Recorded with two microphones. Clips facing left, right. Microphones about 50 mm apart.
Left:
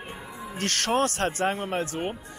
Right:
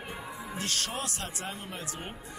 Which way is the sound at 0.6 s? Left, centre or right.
Left.